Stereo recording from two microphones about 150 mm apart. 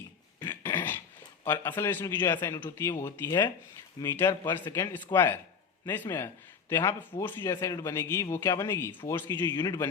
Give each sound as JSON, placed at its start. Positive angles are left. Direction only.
{"t": 0.3, "sound": "throat clearing", "side_deg": 15}
{"t": 1.5, "sound": "a man's voice", "side_deg": 15}